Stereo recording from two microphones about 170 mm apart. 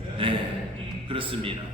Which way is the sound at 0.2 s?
30° right (ahead or behind).